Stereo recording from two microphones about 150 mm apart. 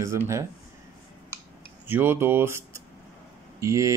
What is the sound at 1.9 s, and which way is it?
Speech, 15° right (ahead or behind).